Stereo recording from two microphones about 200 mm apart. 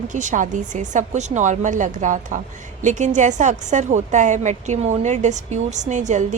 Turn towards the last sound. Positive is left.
turn(degrees=-35)  # may be behind; listen again after turning